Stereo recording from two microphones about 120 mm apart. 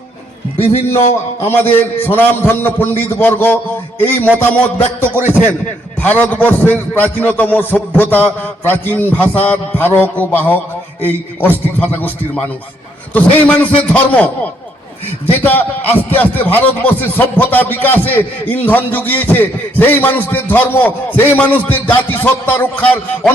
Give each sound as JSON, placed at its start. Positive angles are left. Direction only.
{"t": 1.4, "sound": "a man's voice", "side_deg": 20}
{"t": 15.3, "sound": "a man's voice", "side_deg": 15}